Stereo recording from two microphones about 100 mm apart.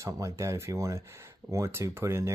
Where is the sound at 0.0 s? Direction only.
30° right (ahead or behind).